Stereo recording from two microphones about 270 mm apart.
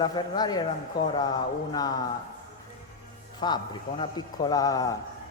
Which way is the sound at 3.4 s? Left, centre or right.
Centre.